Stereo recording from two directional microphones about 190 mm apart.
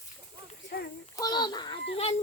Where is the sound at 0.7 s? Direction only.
55° left (ahead or behind).